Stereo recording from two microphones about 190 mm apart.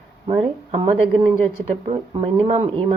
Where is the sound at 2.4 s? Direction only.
35° right (ahead or behind).